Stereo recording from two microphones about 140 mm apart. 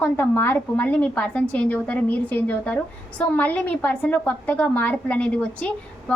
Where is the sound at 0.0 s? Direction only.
15° left (ahead or behind).